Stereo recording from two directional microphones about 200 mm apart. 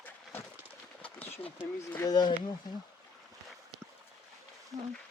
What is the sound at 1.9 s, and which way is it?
Speech, 15° left (ahead or behind).